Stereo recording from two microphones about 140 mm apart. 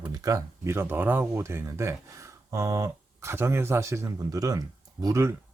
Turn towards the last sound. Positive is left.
turn(degrees=-20)  # may be behind; listen again after turning